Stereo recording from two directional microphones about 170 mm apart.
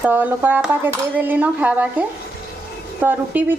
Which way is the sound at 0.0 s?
10° right (ahead or behind).